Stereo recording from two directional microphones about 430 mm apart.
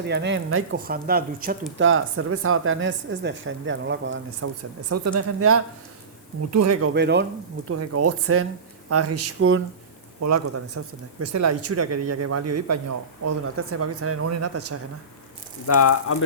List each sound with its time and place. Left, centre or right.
0.0 s a woman's voice: right
15.6 s speech: left